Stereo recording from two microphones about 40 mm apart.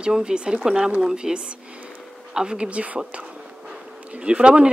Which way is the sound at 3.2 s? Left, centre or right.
Right.